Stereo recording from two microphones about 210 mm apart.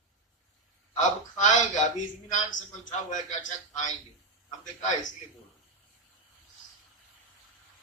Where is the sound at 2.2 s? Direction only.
35° left (ahead or behind).